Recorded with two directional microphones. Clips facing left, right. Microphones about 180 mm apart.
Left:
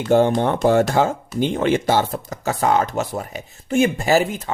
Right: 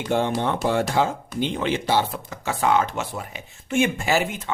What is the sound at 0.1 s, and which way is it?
Speech, 45° left (ahead or behind).